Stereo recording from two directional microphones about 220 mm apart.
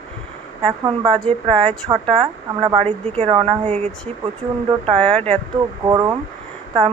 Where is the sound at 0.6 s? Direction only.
20° right (ahead or behind).